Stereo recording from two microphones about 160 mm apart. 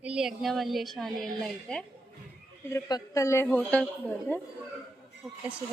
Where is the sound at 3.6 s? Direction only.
5° left (ahead or behind).